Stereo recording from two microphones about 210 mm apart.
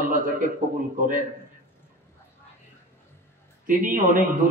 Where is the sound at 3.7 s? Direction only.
40° right (ahead or behind).